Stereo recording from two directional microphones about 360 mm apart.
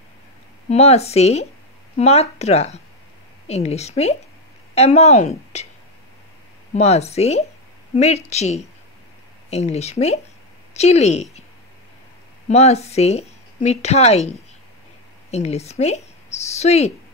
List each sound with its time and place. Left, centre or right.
0.7 s speech: centre
6.7 s a woman's voice: centre
12.4 s speech: centre
15.3 s speech: centre